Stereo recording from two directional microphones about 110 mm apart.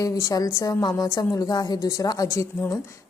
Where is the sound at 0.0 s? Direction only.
30° left (ahead or behind).